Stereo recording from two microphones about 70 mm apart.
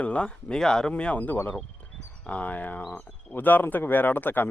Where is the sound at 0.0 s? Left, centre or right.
Centre.